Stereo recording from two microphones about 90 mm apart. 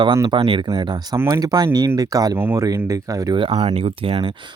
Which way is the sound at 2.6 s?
35° right (ahead or behind).